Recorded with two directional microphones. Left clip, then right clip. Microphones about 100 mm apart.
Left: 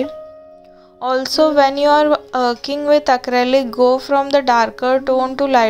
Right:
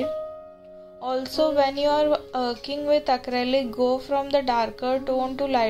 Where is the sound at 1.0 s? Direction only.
45° left (ahead or behind).